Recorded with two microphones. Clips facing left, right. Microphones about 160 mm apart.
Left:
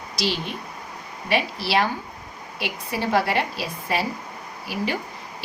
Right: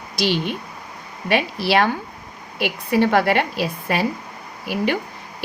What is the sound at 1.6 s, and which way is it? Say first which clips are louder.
A woman's voice: right 4 dB; 55° right (ahead or behind).